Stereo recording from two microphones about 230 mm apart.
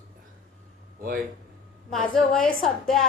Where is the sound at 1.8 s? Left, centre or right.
Centre.